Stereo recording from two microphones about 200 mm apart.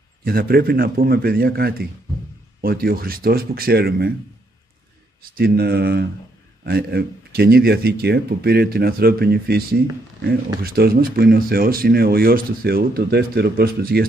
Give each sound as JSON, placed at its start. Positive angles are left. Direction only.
{"t": 0.2, "sound": "speech", "side_deg": -45}
{"t": 5.3, "sound": "speech", "side_deg": -50}